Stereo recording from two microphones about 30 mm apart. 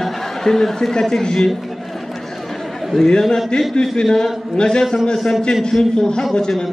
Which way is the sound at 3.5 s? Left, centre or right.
Left.